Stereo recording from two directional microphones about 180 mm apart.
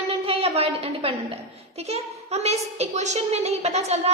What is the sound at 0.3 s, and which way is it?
A woman's voice, 35° right (ahead or behind).